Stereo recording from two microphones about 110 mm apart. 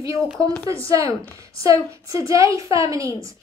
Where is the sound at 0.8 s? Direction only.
30° right (ahead or behind).